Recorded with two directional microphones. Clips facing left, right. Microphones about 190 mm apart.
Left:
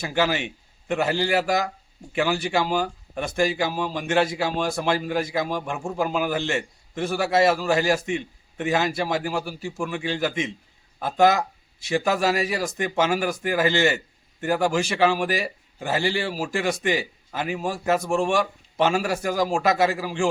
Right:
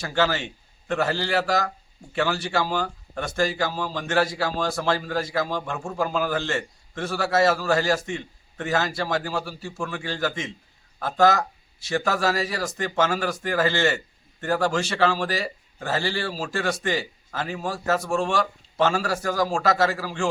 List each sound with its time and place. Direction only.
0.0 s a man's voice: 15° left (ahead or behind)